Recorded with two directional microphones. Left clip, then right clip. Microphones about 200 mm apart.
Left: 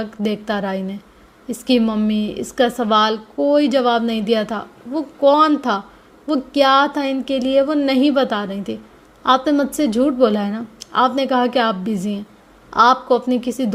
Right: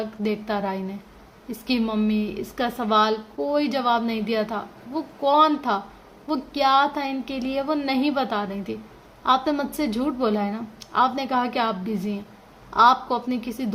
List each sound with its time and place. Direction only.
0.0 s a woman's voice: 35° left (ahead or behind)